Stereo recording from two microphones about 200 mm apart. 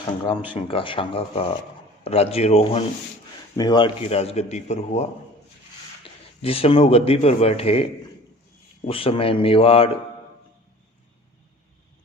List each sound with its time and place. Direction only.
0.5 s a man's voice: 25° left (ahead or behind)
6.4 s a man's voice: 30° left (ahead or behind)